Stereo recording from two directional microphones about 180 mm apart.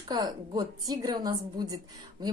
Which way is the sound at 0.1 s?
20° right (ahead or behind).